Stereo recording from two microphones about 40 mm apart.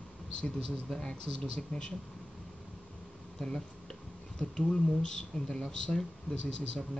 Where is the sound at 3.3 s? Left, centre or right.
Centre.